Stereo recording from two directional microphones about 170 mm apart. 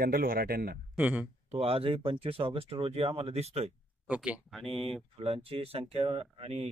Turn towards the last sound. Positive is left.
turn(degrees=-35)  # may be behind; listen again after turning